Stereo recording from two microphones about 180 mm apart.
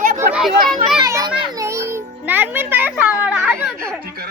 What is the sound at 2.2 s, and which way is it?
Children playing, 10° right (ahead or behind).